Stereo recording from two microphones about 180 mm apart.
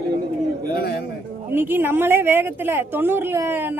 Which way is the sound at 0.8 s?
60° left (ahead or behind).